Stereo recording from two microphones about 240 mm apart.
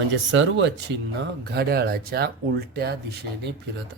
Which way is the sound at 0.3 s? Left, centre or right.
Right.